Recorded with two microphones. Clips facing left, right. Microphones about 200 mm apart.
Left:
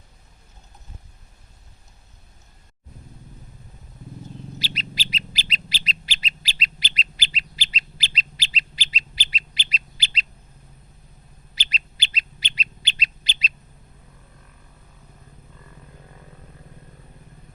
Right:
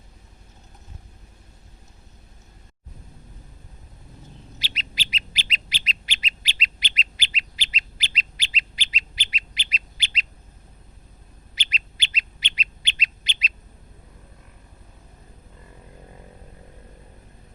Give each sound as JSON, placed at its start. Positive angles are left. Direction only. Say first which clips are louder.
{"t": 4.6, "sound": "bird", "louder": "left 5 dB", "side_deg": 35}
{"t": 11.5, "sound": "bird", "louder": "left 1 dB", "side_deg": 35}